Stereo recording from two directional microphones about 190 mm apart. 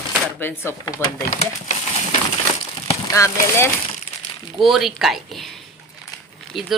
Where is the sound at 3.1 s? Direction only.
15° left (ahead or behind).